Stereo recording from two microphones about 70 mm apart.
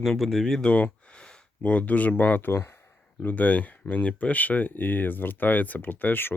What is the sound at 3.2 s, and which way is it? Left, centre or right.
Speech, left.